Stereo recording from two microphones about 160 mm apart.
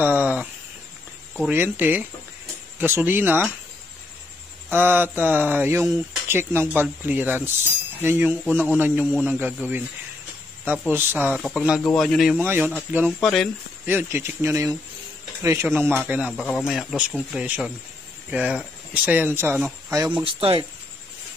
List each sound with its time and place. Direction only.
0.0 s a sound: 10° right (ahead or behind)
1.5 s speech: 10° right (ahead or behind)
4.6 s speech: 10° right (ahead or behind)
10.9 s speech: 15° right (ahead or behind)
11.4 s speech: centre (ahead or behind)
12.4 s speech: 10° right (ahead or behind)
13.2 s speech: 5° left (ahead or behind)
13.8 s speech: 15° right (ahead or behind)
16.4 s speech: 5° left (ahead or behind); by 19.6 s 15° right (ahead or behind)
20.3 s speech: 35° right (ahead or behind)